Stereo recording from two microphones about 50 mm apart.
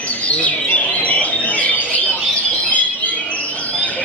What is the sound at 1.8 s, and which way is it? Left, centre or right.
Bird, left.